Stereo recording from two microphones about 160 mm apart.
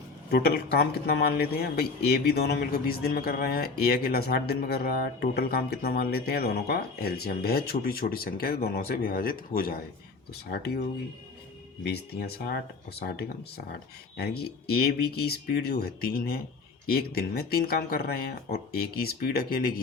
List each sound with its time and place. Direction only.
0.3 s speech: 85° left; by 9.7 s 65° left (ahead or behind)
10.3 s speech: 80° left
13.0 s speech: 70° left (ahead or behind)
14.7 s speech: 80° left